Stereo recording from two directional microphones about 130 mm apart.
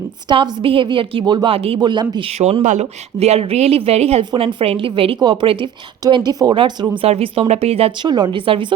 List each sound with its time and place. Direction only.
0.3 s a woman's voice: 40° right (ahead or behind)
2.4 s speech: 60° right (ahead or behind)
4.2 s a woman's voice: 40° right (ahead or behind)
7.0 s speech: 45° right (ahead or behind)
8.0 s a woman's voice: 35° right (ahead or behind)